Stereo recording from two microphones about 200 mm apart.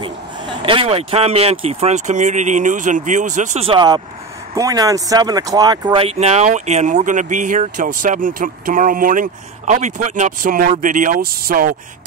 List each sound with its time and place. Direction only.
0.6 s speech: 25° right (ahead or behind); by 11.7 s 45° right (ahead or behind)